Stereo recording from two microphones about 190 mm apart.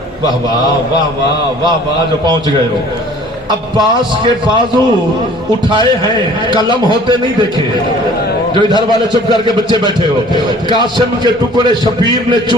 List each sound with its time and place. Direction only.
3.8 s a man's voice: 25° right (ahead or behind)
6.7 s a man's voice: 25° right (ahead or behind)
8.5 s a man's voice: 25° right (ahead or behind)